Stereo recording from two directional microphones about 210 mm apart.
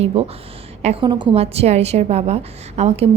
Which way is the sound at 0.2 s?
30° right (ahead or behind).